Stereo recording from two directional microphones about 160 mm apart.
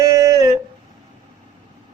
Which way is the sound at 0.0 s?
20° right (ahead or behind).